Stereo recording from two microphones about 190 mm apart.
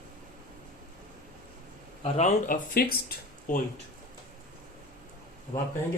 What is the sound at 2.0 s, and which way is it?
Speech, 40° left (ahead or behind).